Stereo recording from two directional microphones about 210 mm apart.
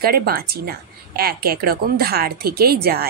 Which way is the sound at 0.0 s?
45° right (ahead or behind).